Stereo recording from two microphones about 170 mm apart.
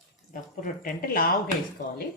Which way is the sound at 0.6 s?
55° left (ahead or behind).